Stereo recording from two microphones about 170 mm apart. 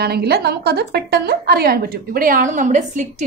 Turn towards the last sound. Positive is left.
turn(degrees=-45)  # may be behind; listen again after turning